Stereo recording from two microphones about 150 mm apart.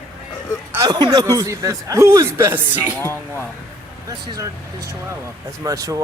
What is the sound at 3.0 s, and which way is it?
Speech, 15° left (ahead or behind).